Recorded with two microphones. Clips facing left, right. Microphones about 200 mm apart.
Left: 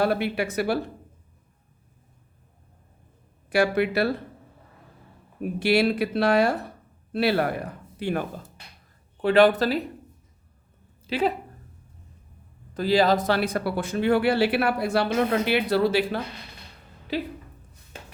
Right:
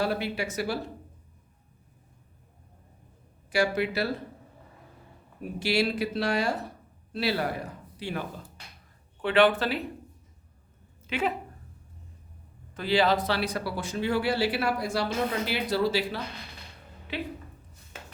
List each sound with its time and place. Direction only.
0.0 s speech: 60° left (ahead or behind)
3.5 s speech: 60° left (ahead or behind)
5.5 s a man's voice: 55° left (ahead or behind)
9.2 s speech: 40° left (ahead or behind)
11.0 s a woman's voice: 35° left (ahead or behind)
12.7 s speech: 40° left (ahead or behind); by 16.2 s 55° left (ahead or behind)
17.1 s speech: 40° left (ahead or behind)